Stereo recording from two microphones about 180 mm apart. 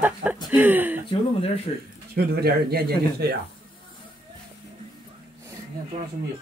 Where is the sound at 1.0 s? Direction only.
30° left (ahead or behind).